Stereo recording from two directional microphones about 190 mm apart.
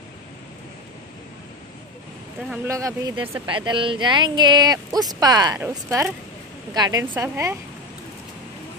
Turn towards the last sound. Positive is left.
turn(degrees=-15)  # may be behind; listen again after turning